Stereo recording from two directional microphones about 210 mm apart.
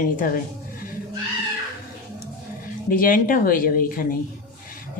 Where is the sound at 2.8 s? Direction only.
40° left (ahead or behind).